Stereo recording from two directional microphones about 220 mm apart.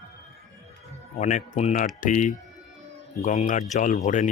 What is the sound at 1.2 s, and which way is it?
Speech, 30° left (ahead or behind).